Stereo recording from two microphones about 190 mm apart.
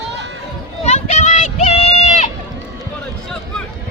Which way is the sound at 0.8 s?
35° left (ahead or behind).